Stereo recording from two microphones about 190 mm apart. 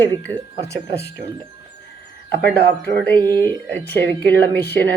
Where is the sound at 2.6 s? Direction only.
60° right (ahead or behind).